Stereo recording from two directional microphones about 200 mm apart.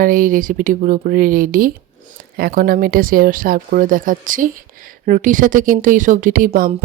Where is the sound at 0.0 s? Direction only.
45° right (ahead or behind).